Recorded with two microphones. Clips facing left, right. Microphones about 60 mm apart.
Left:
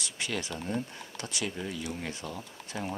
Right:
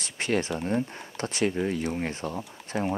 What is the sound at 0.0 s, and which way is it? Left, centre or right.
Speech, right.